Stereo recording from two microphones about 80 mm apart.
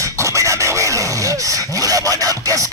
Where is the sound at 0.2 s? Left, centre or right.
Right.